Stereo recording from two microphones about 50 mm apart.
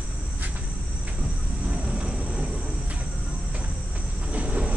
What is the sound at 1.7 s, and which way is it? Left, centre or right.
Vehicle, centre.